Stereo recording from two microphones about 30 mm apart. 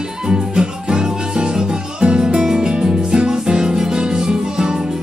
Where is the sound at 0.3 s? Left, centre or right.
Right.